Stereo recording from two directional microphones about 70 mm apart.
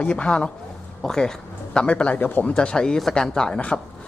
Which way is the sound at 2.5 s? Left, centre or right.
Centre.